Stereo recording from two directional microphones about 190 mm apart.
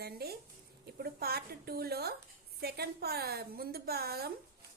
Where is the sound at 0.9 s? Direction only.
55° right (ahead or behind).